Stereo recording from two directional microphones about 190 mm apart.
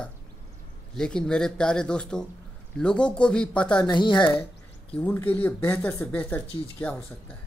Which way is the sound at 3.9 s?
25° left (ahead or behind).